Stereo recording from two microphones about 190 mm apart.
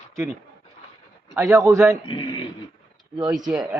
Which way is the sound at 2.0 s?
25° left (ahead or behind).